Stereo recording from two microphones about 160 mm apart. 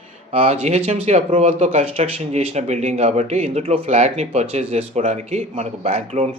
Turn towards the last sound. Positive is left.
turn(degrees=-40)  # may be behind; listen again after turning